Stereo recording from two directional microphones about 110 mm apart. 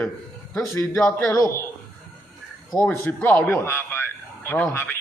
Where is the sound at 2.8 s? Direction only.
15° left (ahead or behind).